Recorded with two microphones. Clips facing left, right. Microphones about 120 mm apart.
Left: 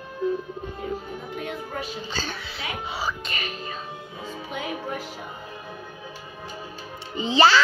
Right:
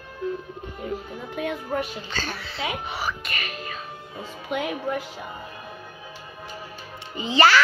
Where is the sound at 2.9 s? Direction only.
15° left (ahead or behind).